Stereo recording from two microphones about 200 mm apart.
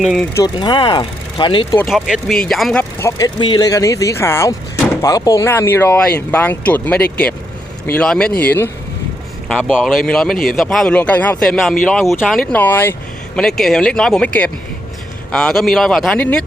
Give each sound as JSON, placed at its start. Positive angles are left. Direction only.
{"t": 0.0, "sound": "speech", "side_deg": 0}
{"t": 0.3, "sound": "speech", "side_deg": 20}
{"t": 1.8, "sound": "speech", "side_deg": 0}
{"t": 3.0, "sound": "speech", "side_deg": 15}
{"t": 9.5, "sound": "speech", "side_deg": -5}